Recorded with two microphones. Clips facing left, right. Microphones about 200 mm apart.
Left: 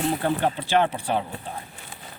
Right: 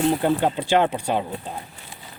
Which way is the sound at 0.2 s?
15° right (ahead or behind).